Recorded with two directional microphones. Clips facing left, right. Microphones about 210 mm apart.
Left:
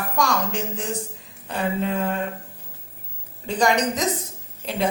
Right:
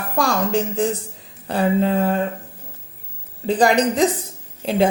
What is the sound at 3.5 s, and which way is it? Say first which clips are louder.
A woman's voice: right 5 dB; 35° right (ahead or behind).